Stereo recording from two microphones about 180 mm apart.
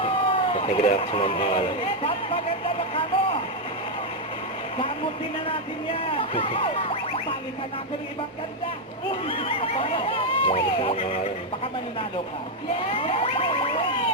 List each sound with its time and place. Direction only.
0.0 s a sound: 30° left (ahead or behind)
6.1 s speech: 30° left (ahead or behind)
9.2 s speech: 30° left (ahead or behind)
12.9 s speech: 30° left (ahead or behind)